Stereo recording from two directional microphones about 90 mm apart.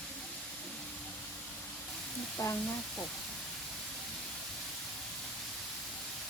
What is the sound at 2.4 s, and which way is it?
Speech, 40° left (ahead or behind).